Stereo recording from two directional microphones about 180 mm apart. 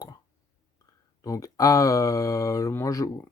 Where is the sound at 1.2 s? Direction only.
20° left (ahead or behind).